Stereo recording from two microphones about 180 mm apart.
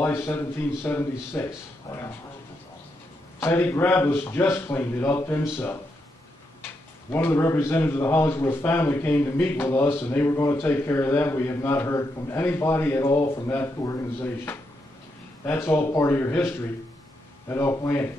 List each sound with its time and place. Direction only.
0.0 s a man's voice: 15° left (ahead or behind)
3.3 s a man's voice: 15° left (ahead or behind)
7.1 s a man's voice: 15° left (ahead or behind)